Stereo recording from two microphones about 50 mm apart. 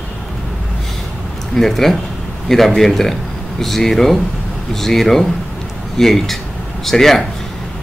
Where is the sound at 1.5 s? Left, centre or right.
Centre.